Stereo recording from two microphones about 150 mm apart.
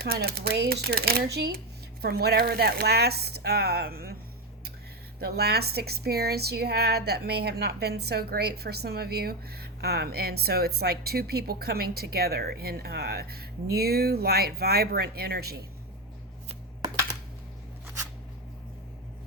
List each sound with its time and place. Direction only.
0.0 s a woman's voice: 90° right
5.2 s a woman's voice: 90° right